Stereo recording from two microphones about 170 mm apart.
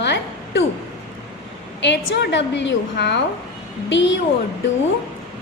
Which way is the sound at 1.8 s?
90° left.